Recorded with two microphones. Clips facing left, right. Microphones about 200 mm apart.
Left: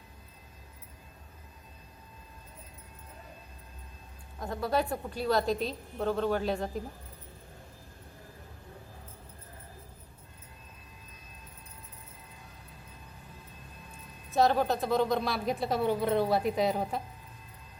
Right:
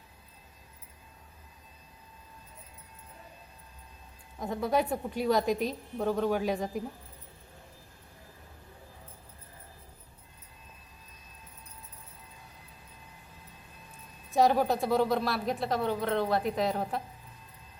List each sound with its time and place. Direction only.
4.4 s a woman's voice: 15° right (ahead or behind)
14.3 s speech: 10° right (ahead or behind)